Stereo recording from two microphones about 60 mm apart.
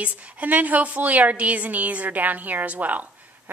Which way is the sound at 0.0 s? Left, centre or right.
Right.